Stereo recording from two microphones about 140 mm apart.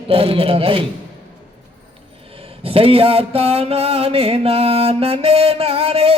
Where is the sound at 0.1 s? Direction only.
45° right (ahead or behind).